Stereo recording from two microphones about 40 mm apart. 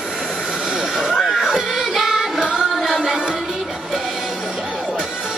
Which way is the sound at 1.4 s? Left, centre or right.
Centre.